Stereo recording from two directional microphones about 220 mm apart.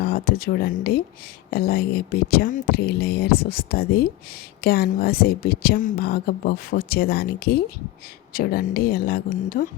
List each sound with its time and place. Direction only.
0.0 s a woman's voice: 45° left (ahead or behind)